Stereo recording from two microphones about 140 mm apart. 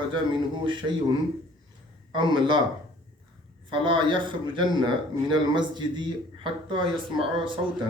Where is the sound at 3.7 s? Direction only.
35° right (ahead or behind).